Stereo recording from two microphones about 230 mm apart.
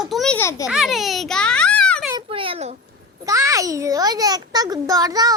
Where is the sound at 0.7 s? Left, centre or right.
Centre.